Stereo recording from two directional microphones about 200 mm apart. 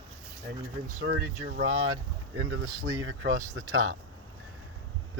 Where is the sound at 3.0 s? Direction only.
75° right (ahead or behind).